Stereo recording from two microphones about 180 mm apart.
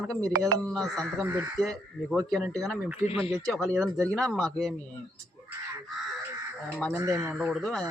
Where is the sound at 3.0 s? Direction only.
35° left (ahead or behind).